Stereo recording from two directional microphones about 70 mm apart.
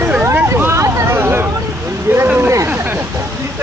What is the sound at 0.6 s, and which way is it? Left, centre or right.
Vehicle, right.